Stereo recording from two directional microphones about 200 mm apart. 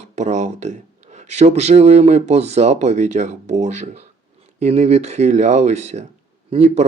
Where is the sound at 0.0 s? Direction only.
35° right (ahead or behind).